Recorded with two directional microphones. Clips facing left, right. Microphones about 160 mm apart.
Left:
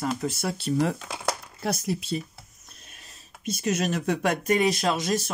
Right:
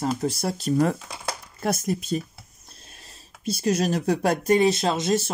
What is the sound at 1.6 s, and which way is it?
Speech, 50° right (ahead or behind).